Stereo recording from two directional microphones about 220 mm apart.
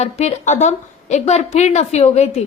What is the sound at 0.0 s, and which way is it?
A woman's voice, 30° left (ahead or behind).